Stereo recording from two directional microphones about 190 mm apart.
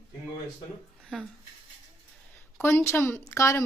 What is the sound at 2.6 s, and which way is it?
Speech, 15° left (ahead or behind).